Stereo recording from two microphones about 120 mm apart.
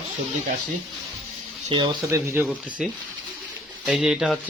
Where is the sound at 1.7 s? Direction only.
50° right (ahead or behind).